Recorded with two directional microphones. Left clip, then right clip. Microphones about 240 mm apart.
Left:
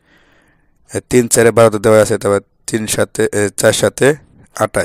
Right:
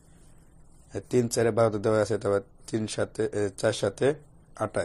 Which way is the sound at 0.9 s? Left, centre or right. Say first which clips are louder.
Left 14 dB; left.